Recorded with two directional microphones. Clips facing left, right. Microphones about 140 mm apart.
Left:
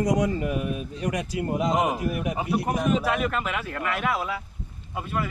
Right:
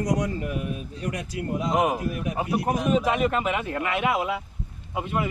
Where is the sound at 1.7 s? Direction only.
5° right (ahead or behind).